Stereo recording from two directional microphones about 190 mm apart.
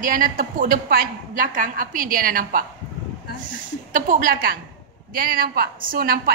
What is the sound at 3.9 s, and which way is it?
A woman's voice, 45° right (ahead or behind).